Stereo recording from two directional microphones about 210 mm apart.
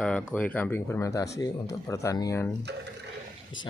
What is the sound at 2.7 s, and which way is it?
Speech, 55° right (ahead or behind).